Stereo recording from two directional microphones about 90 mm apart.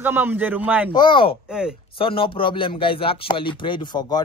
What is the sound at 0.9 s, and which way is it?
Speech, 65° left (ahead or behind).